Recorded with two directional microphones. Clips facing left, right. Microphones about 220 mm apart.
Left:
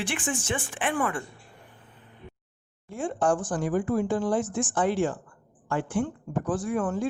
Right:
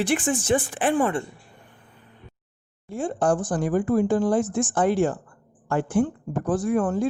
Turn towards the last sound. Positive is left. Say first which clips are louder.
# right 5 dB
turn(degrees=-40)  # may be behind; listen again after turning